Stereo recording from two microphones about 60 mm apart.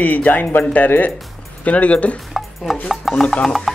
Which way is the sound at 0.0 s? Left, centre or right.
Left.